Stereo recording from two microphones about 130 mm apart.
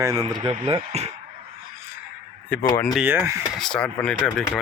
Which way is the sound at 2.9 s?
15° right (ahead or behind).